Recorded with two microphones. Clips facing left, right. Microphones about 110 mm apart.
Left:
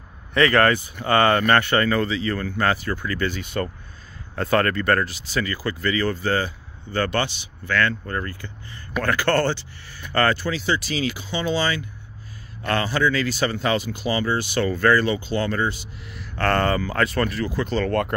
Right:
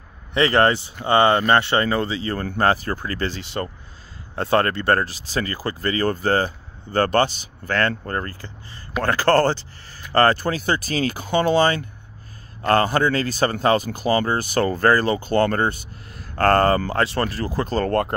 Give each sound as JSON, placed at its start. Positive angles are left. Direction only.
{"t": 0.3, "sound": "speech", "side_deg": -25}